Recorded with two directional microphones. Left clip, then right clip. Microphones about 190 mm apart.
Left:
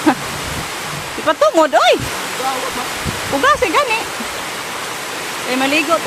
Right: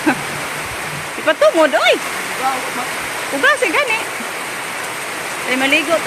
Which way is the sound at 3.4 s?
10° left (ahead or behind).